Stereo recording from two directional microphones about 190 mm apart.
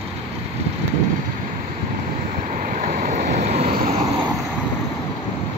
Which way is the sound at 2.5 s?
45° right (ahead or behind).